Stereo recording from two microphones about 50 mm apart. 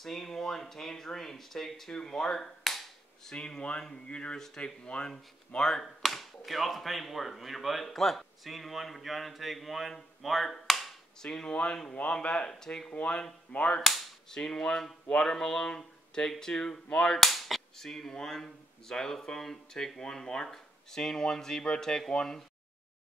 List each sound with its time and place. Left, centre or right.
0.0 s speech: centre
3.3 s speech: centre
5.6 s speech: centre
11.2 s speech: centre
13.5 s a sound: left
14.3 s speech: centre
15.8 s cap gun: centre
20.0 s speech: centre